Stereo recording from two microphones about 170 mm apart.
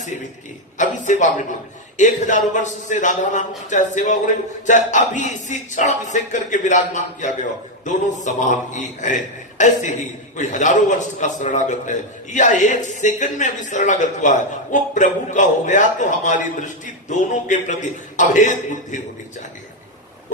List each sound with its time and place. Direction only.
0.8 s speech: 45° left (ahead or behind)